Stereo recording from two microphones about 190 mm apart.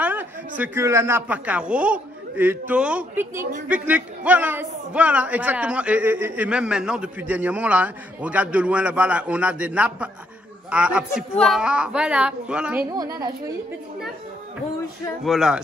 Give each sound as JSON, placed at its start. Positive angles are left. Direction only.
{"t": 0.0, "sound": "a sound", "side_deg": -10}
{"t": 0.6, "sound": "a man's voice", "side_deg": -15}
{"t": 12.9, "sound": "a woman's voice", "side_deg": -20}
{"t": 15.2, "sound": "a woman's voice", "side_deg": 0}